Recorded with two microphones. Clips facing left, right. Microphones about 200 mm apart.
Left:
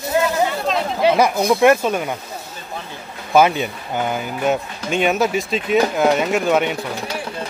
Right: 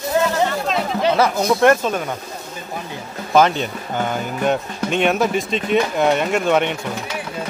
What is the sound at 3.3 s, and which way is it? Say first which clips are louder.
Speech: left 1 dB; 10° left (ahead or behind).